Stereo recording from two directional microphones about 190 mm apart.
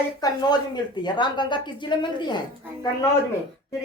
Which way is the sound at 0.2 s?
20° left (ahead or behind).